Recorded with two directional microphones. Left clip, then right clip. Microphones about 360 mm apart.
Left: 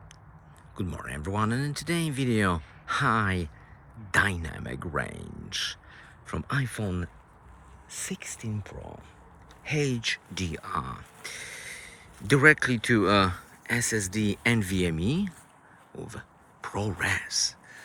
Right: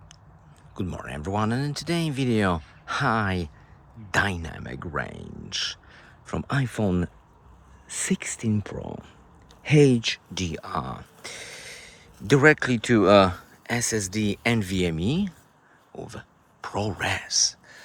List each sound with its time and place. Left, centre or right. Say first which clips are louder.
0.8 s speech: right 3 dB; centre
8.5 s speech: right 8 dB; right
9.7 s speech: right 9 dB; centre
16.0 s a sound: right 3 dB; centre